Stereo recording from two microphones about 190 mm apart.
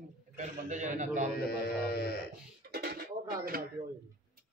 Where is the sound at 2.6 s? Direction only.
55° right (ahead or behind).